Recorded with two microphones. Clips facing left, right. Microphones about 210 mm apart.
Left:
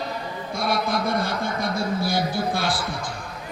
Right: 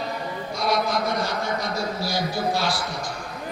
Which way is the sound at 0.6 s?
55° left (ahead or behind).